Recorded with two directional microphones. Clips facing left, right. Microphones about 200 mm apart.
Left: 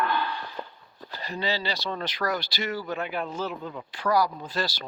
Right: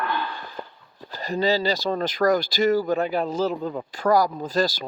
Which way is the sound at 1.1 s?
45° right (ahead or behind).